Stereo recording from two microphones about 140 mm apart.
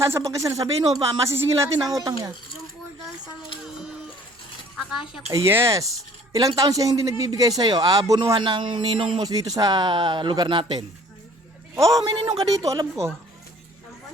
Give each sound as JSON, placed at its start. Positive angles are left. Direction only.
{"t": 0.0, "sound": "a man's voice", "side_deg": -20}
{"t": 1.8, "sound": "speech", "side_deg": 0}
{"t": 4.9, "sound": "speech", "side_deg": -5}
{"t": 5.3, "sound": "a man's voice", "side_deg": -20}
{"t": 11.7, "sound": "a man's voice", "side_deg": -20}